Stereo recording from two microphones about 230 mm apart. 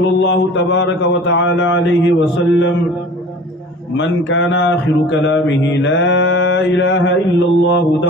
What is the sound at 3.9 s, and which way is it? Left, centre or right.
A man's voice, left.